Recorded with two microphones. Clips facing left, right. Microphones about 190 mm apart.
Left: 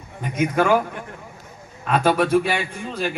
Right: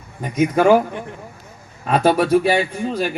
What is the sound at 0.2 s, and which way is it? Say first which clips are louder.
Speech: right 4 dB; 40° right (ahead or behind).